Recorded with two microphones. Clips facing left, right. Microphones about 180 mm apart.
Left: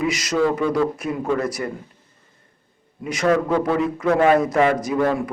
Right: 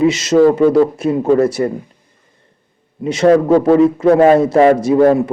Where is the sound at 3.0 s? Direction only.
25° right (ahead or behind).